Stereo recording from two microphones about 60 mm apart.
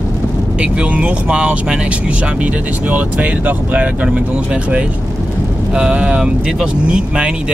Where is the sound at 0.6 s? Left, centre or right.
Right.